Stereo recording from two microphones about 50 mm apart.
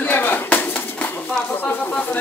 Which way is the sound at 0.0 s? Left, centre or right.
Left.